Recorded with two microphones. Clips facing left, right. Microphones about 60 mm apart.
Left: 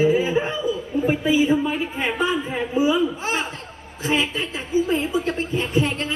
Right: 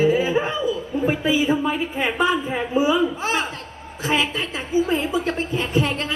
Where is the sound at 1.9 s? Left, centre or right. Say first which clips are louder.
Right 3 dB; right.